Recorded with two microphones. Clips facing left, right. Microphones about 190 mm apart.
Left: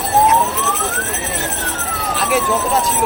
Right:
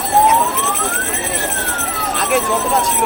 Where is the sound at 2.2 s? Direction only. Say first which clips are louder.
Even; centre (ahead or behind).